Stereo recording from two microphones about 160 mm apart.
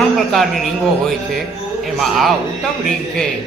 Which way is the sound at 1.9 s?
Centre (ahead or behind).